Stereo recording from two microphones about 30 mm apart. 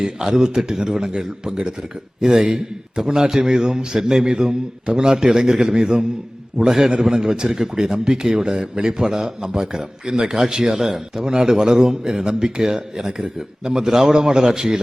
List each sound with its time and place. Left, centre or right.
0.0 s a man's voice: right
13.2 s a man's voice: right